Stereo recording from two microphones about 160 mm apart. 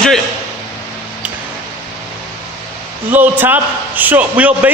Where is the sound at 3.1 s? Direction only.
10° right (ahead or behind).